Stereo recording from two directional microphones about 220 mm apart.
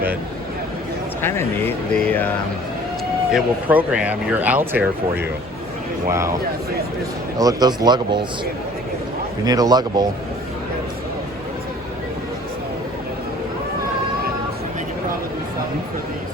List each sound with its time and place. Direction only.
1.2 s speech: 10° left (ahead or behind)
3.3 s speech: 5° right (ahead or behind)
6.1 s speech: 15° right (ahead or behind)
7.3 s speech: 15° right (ahead or behind)
9.5 s speech: 15° right (ahead or behind)